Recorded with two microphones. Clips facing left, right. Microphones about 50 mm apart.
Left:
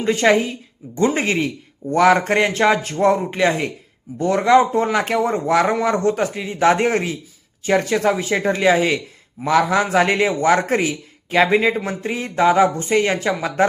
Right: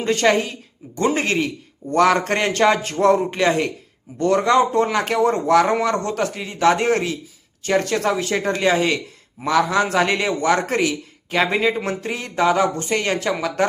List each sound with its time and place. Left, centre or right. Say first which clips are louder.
0.0 s a man's voice: left 2 dB; centre